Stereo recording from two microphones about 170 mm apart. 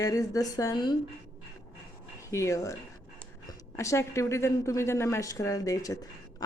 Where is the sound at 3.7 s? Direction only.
15° left (ahead or behind).